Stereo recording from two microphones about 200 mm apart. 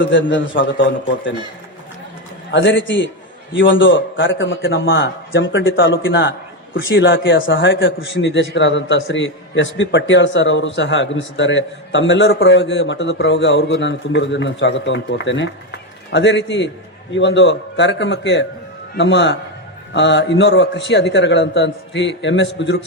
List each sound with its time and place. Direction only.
0.0 s a man's voice: 65° left (ahead or behind)
2.5 s a man's voice: 65° left (ahead or behind)